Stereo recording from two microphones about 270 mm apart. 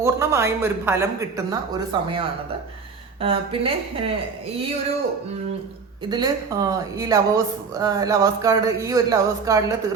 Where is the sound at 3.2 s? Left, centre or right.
Right.